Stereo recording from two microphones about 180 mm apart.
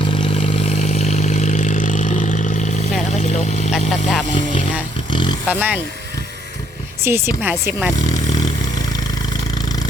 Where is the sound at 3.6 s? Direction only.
Centre (ahead or behind).